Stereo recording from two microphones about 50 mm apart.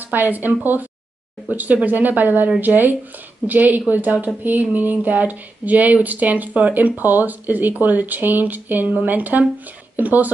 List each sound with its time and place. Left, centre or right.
0.1 s speech: right